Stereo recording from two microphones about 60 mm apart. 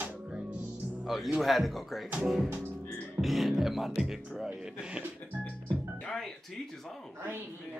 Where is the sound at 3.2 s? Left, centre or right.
Centre.